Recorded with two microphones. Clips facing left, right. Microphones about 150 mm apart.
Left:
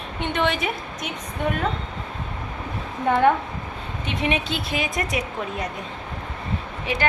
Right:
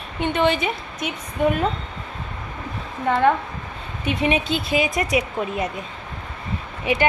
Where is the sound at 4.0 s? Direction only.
5° right (ahead or behind).